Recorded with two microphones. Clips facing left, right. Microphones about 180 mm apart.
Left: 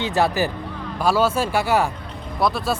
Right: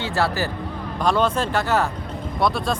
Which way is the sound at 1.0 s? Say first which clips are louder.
Left 1 dB; 5° left (ahead or behind).